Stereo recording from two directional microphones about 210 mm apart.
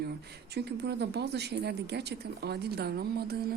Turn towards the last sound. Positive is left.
turn(degrees=-45)  # may be behind; listen again after turning